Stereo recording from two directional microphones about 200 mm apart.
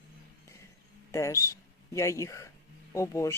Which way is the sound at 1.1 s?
15° left (ahead or behind).